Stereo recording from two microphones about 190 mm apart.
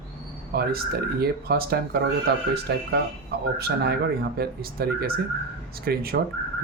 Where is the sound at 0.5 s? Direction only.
55° right (ahead or behind).